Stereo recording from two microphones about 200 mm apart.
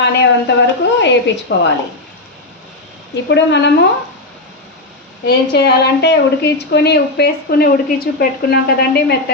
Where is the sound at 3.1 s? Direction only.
60° left (ahead or behind).